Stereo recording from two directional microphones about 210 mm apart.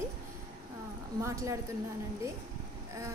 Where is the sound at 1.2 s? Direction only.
15° right (ahead or behind).